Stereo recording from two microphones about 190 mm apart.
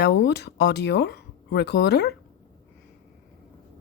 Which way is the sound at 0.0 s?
65° left (ahead or behind).